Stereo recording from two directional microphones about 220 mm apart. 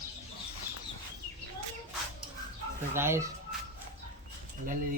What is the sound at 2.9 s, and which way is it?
Speech, 10° right (ahead or behind).